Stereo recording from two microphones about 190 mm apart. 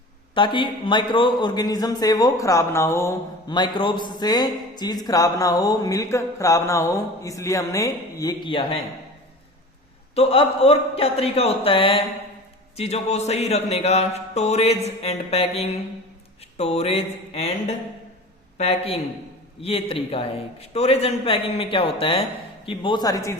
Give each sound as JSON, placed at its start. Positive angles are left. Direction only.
{"t": 0.3, "sound": "a man's voice", "side_deg": 25}
{"t": 10.2, "sound": "mantra", "side_deg": 30}
{"t": 18.5, "sound": "a man's voice", "side_deg": 35}
{"t": 19.6, "sound": "mantra", "side_deg": 30}
{"t": 22.6, "sound": "a man's voice", "side_deg": 25}